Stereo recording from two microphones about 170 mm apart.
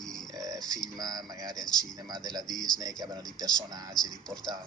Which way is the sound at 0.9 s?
20° right (ahead or behind).